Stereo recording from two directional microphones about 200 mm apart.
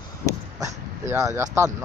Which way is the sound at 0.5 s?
15° right (ahead or behind).